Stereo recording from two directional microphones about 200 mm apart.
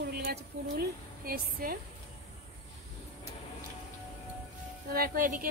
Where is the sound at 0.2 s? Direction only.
50° right (ahead or behind).